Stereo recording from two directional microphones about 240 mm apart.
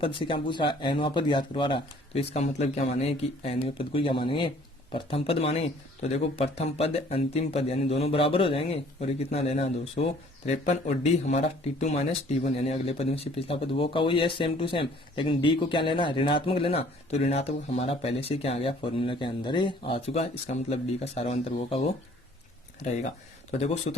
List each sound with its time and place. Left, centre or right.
0.0 s speech: left